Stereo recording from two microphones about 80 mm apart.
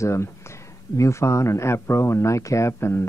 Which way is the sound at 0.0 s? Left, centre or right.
Left.